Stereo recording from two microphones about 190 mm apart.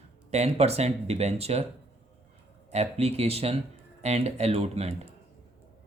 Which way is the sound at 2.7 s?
35° right (ahead or behind).